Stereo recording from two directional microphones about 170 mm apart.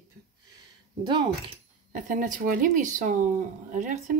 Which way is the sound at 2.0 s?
50° right (ahead or behind).